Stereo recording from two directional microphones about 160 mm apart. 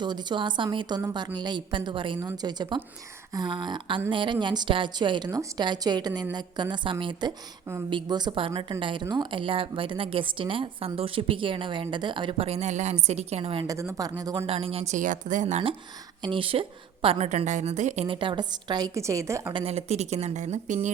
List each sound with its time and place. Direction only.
0.0 s a woman's voice: 25° right (ahead or behind)
13.7 s a woman's voice: 20° right (ahead or behind)
14.3 s speech: 35° right (ahead or behind)
16.2 s a woman's voice: 35° right (ahead or behind); by 19.5 s 15° right (ahead or behind)
19.5 s speech: 40° right (ahead or behind)